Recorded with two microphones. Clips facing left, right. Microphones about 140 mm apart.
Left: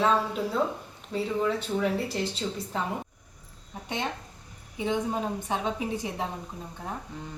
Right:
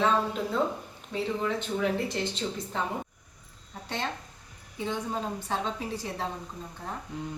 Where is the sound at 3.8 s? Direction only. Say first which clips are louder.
Left 1 dB; 15° left (ahead or behind).